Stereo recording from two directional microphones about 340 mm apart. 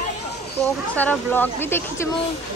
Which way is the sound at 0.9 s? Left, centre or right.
Centre.